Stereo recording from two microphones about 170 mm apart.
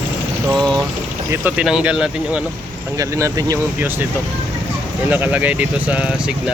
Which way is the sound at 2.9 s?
20° right (ahead or behind).